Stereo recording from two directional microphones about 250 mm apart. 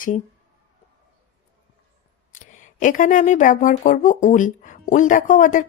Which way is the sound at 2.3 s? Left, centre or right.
Left.